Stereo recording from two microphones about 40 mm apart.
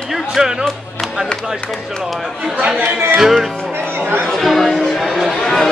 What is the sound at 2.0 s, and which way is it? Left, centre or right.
Chatter, centre.